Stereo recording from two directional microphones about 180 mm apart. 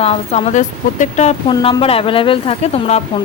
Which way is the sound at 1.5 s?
30° left (ahead or behind).